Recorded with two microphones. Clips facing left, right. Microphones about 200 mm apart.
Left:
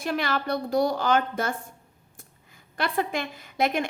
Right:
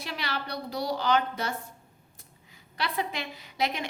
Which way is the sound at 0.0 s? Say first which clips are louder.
Left 8 dB; 50° left (ahead or behind).